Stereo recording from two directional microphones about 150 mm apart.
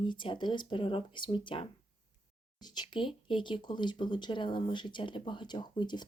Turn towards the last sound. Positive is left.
turn(degrees=30)  # may be behind; listen again after turning